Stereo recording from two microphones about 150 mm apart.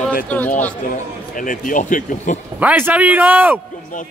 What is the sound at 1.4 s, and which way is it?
Speech, 60° left (ahead or behind).